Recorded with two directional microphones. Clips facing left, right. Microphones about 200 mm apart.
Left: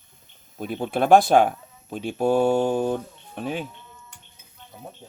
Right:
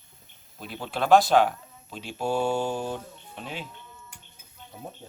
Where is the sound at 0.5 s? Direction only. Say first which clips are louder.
Left 7 dB; 50° left (ahead or behind).